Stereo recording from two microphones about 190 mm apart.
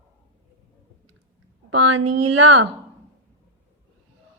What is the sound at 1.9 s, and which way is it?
Speech, 90° right.